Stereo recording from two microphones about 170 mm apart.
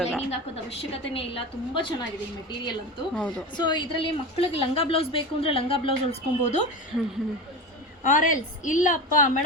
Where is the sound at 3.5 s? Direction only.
25° left (ahead or behind).